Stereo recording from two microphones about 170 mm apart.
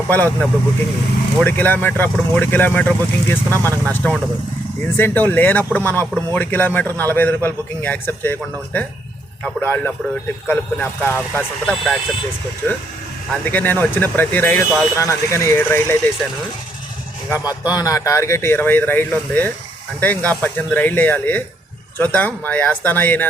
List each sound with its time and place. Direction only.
0.1 s speech: 10° left (ahead or behind)
13.4 s speech: 10° left (ahead or behind)
17.2 s speech: 15° left (ahead or behind)